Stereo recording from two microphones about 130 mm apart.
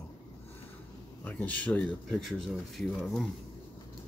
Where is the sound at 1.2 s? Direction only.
10° left (ahead or behind).